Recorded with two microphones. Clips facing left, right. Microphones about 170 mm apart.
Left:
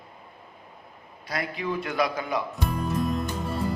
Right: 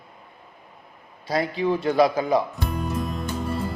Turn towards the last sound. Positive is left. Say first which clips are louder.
# even
turn(degrees=0)  # may be behind; listen again after turning